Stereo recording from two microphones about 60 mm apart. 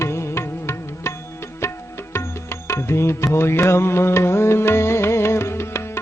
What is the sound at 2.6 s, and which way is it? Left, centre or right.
Music, left.